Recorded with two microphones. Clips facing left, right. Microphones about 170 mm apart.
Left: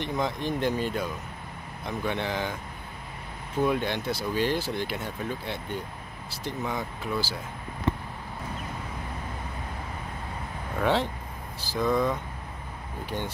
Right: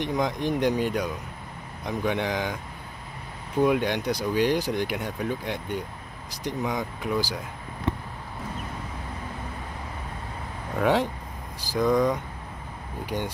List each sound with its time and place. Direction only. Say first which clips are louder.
0.0 s speech: right 3 dB; 15° right (ahead or behind)
3.6 s speech: right 3 dB; 15° right (ahead or behind)
10.8 s speech: right 3 dB; 15° right (ahead or behind)
13.1 s speech: right 3 dB; 5° left (ahead or behind)